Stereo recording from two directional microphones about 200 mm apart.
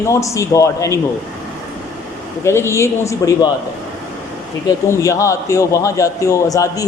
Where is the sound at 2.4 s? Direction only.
15° left (ahead or behind).